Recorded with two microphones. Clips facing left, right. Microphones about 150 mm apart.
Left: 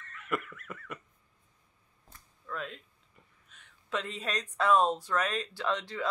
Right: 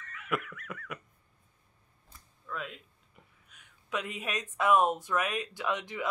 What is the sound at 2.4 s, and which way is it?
Speech, 5° right (ahead or behind).